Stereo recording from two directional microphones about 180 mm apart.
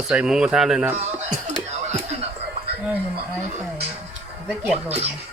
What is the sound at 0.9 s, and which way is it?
Speech, 40° right (ahead or behind).